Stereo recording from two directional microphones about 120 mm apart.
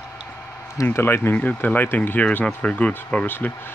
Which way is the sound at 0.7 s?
20° left (ahead or behind).